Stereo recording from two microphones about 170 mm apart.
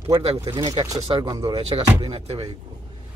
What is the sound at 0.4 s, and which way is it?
Speech, 20° right (ahead or behind).